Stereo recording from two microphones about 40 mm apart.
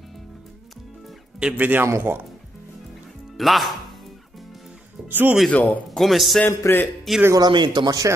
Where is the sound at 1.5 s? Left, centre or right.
Right.